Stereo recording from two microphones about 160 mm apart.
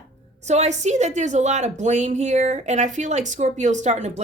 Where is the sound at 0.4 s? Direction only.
45° right (ahead or behind).